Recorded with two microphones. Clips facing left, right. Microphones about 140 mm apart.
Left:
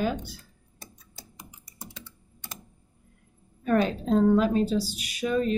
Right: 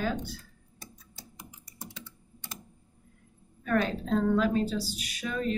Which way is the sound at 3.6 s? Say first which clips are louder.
Left 4 dB; 20° left (ahead or behind).